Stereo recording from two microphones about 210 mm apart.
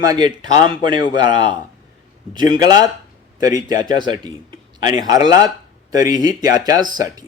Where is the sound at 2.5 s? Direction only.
20° right (ahead or behind).